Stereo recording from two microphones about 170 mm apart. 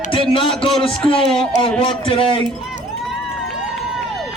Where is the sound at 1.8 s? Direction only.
30° left (ahead or behind).